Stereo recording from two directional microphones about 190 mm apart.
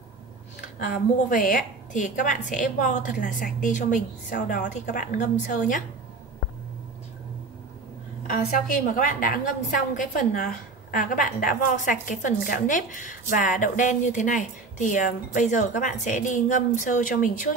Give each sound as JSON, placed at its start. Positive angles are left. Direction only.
{"t": 0.7, "sound": "a woman's voice", "side_deg": 45}
{"t": 8.3, "sound": "a woman's voice", "side_deg": 45}